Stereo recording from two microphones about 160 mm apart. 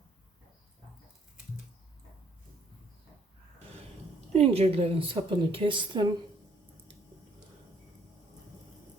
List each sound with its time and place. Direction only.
4.3 s a woman's voice: 40° right (ahead or behind)